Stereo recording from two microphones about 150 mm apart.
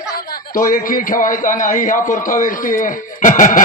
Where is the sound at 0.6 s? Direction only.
65° left (ahead or behind).